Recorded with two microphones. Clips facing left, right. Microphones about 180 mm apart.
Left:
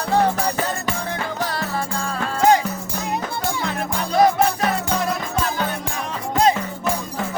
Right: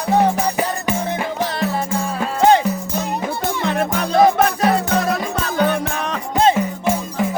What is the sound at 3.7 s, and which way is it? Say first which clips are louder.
Music: right 6 dB; 75° right (ahead or behind).